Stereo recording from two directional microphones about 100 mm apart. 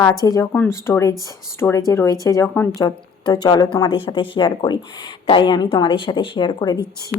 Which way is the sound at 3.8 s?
60° left (ahead or behind).